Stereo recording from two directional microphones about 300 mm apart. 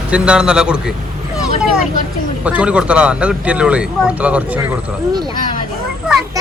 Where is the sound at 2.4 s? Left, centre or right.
Centre.